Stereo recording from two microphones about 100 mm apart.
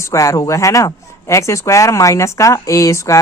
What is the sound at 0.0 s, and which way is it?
Speech, 30° left (ahead or behind).